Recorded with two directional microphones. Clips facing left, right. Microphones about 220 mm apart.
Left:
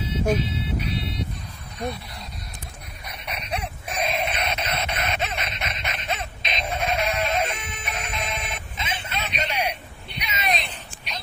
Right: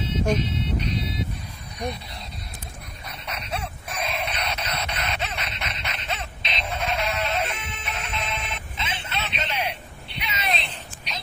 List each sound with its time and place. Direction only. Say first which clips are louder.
0.2 s music: left 1 dB; 5° left (ahead or behind)
3.1 s dog: left 1 dB; 15° left (ahead or behind)
3.9 s a sound: left 4 dB; 20° left (ahead or behind)
6.0 s music: left 3 dB; 15° left (ahead or behind)